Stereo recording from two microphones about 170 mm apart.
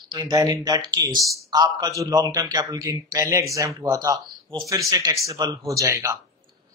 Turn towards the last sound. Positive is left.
turn(degrees=-15)  # may be behind; listen again after turning